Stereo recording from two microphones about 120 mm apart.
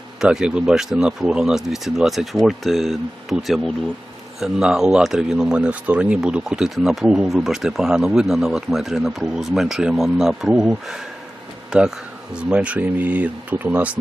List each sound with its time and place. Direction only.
0.2 s a man's voice: 5° right (ahead or behind)